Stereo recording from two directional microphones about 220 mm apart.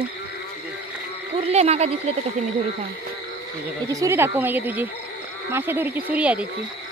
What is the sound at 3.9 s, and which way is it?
Speech, 15° right (ahead or behind).